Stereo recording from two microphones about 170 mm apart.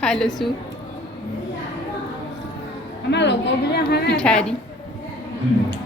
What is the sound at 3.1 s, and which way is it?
A woman's voice, 90° left.